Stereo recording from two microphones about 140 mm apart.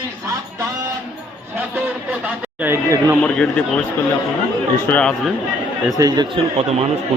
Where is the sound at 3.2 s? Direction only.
5° left (ahead or behind).